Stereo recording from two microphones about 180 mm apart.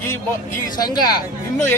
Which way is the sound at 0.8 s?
20° left (ahead or behind).